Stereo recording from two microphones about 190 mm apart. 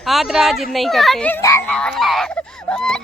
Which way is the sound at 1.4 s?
15° left (ahead or behind).